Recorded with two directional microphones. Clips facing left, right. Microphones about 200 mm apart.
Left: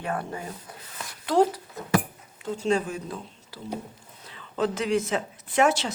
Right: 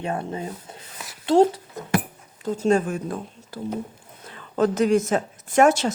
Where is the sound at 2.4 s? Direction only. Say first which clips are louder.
Right 5 dB; 45° right (ahead or behind).